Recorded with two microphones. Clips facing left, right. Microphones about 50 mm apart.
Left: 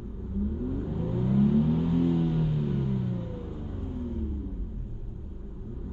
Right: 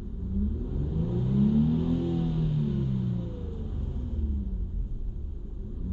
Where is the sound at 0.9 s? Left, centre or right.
Left.